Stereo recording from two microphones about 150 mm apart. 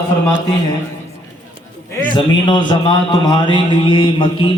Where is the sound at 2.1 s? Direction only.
30° left (ahead or behind).